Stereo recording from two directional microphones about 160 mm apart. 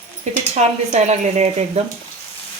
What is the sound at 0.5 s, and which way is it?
A woman's voice, 45° right (ahead or behind).